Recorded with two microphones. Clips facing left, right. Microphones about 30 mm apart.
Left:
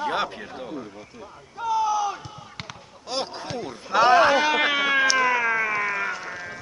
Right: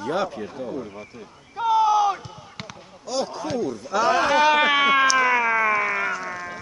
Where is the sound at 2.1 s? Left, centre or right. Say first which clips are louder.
Even; centre.